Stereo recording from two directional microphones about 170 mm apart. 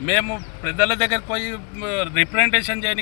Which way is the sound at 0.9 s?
25° right (ahead or behind).